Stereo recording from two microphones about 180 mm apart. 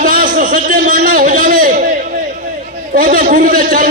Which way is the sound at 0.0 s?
50° right (ahead or behind).